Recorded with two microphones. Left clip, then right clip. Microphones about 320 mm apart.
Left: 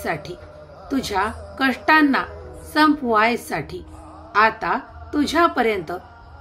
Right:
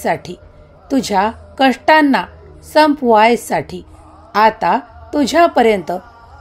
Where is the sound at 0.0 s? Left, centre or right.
Right.